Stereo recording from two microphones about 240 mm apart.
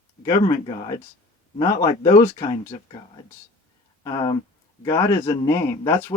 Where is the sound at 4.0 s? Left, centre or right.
Centre.